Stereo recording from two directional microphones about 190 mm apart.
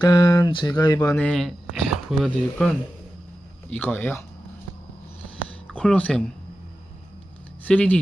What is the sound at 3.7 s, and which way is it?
Speech, 10° left (ahead or behind).